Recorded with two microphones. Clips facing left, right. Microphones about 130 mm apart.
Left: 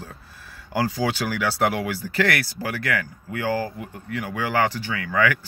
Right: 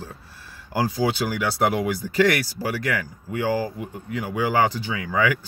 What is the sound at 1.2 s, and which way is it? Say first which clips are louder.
Speech: even; 15° right (ahead or behind).